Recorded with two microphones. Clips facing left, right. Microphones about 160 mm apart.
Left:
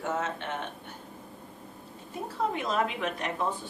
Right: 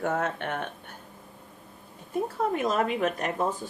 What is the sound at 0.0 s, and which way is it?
Speech, 55° right (ahead or behind).